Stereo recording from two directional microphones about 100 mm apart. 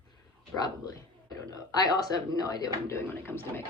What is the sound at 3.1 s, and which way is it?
Speech, 25° left (ahead or behind).